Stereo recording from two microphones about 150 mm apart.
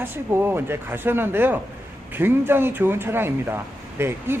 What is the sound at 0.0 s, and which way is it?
A man's voice, 15° right (ahead or behind).